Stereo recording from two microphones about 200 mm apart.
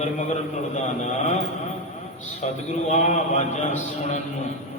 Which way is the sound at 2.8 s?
35° left (ahead or behind).